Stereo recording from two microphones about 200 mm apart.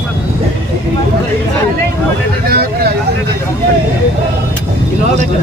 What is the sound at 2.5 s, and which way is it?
Vehicle, 50° right (ahead or behind).